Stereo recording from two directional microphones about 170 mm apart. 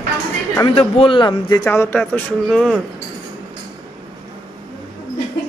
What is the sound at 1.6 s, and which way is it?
Speech, 10° left (ahead or behind).